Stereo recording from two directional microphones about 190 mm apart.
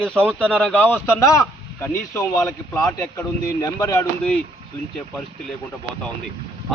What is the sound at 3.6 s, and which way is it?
Speech, 15° left (ahead or behind).